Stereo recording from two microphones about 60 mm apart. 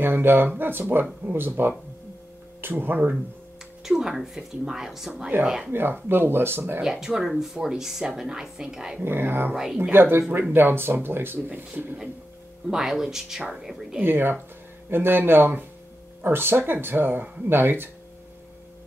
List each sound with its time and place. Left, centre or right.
0.0 s speech: right
3.8 s speech: centre
5.7 s speech: right
6.8 s speech: centre
9.0 s speech: right
12.6 s speech: centre
14.0 s speech: right